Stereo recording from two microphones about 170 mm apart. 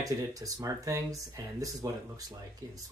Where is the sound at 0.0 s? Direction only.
20° right (ahead or behind).